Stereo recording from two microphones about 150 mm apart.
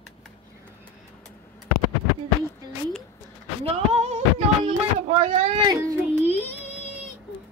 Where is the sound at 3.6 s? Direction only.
45° right (ahead or behind).